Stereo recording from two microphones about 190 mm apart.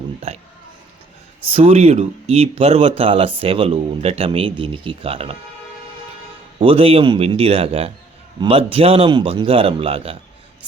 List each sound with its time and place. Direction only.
0.3 s speech: 35° right (ahead or behind)
1.5 s speech: 30° right (ahead or behind)
6.6 s a man's voice: 30° right (ahead or behind)